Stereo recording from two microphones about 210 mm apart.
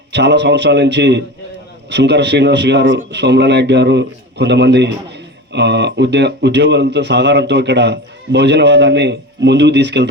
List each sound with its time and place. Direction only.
0.1 s speech: 55° right (ahead or behind)